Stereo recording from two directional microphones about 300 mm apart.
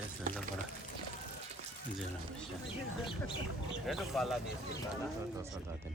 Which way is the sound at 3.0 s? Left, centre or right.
Centre.